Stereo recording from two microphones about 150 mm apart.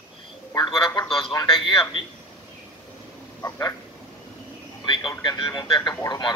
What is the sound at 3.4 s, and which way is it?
Speech, 20° left (ahead or behind).